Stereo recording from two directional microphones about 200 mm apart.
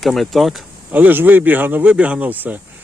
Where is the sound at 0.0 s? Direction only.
Centre (ahead or behind).